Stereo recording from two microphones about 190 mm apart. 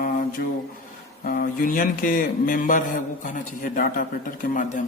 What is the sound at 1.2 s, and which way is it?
Mantra, 45° left (ahead or behind).